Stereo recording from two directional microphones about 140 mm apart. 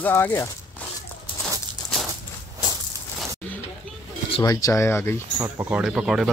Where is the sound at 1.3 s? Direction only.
35° left (ahead or behind).